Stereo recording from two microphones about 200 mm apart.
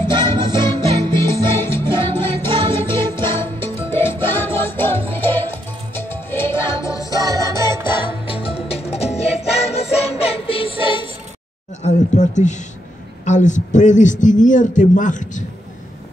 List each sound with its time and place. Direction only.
0.6 s music: 20° right (ahead or behind)
1.2 s music: 10° left (ahead or behind)
7.2 s music: 15° right (ahead or behind)
8.3 s music: 30° left (ahead or behind)
11.8 s a sound: 35° left (ahead or behind)
13.2 s a man's voice: 40° left (ahead or behind)